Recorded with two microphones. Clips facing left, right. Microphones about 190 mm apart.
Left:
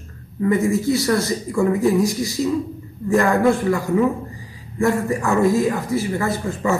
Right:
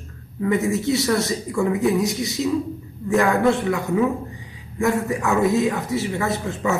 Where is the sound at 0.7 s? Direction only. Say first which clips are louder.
Left 2 dB; 20° right (ahead or behind).